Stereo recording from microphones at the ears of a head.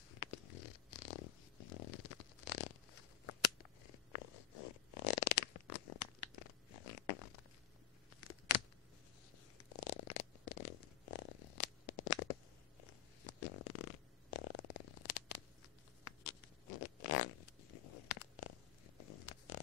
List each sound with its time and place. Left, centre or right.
0.1 s a sound: left
9.6 s zipper: left
12.8 s fart: left
16.0 s zipper: left